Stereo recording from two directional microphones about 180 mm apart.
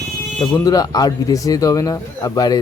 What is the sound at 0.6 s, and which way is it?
Speech, 20° left (ahead or behind).